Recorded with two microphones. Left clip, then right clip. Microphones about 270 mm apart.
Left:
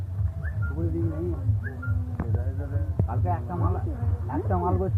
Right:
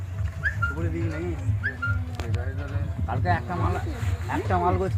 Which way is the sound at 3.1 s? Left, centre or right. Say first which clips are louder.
Right 6 dB; right.